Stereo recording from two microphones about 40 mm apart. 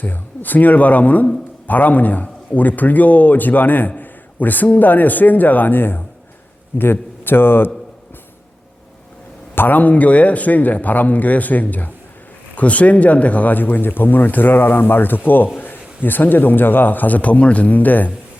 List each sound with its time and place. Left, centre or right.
0.0 s a man's voice: left
9.6 s a man's voice: left
17.2 s speech: left